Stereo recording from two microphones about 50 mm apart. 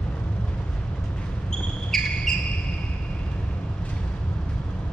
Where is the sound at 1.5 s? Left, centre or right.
Centre.